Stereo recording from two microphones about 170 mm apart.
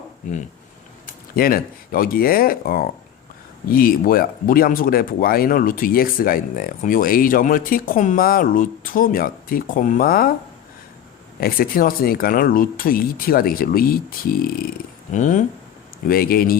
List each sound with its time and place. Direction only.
1.0 s speech: 60° left (ahead or behind)
11.3 s speech: 60° left (ahead or behind)
15.1 s speech: 45° left (ahead or behind)
16.0 s speech: 60° left (ahead or behind)